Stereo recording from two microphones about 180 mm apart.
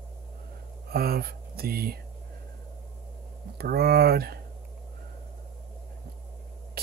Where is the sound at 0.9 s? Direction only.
55° right (ahead or behind).